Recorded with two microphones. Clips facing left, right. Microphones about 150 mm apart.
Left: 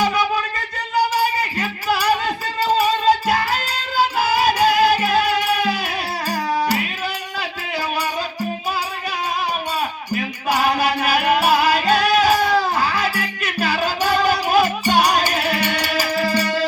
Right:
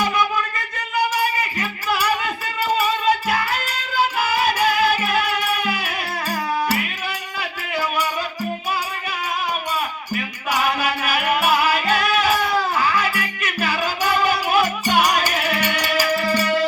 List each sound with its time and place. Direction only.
0.9 s music: 35° left (ahead or behind)
10.5 s music: 35° left (ahead or behind)